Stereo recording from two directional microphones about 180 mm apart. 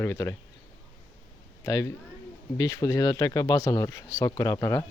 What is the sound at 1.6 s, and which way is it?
Speech, 15° left (ahead or behind).